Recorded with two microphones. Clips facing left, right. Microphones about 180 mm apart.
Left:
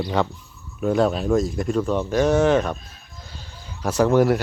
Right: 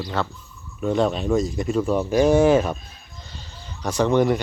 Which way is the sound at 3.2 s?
5° left (ahead or behind).